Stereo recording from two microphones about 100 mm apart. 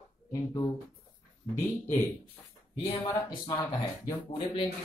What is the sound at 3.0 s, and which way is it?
Speech, 40° left (ahead or behind).